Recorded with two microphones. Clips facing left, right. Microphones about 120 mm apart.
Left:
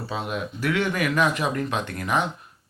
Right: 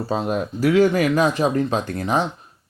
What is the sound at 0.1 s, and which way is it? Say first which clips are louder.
Speech: right 6 dB; 40° right (ahead or behind).